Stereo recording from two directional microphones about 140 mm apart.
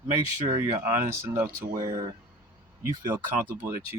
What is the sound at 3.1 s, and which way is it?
Speech, 15° right (ahead or behind).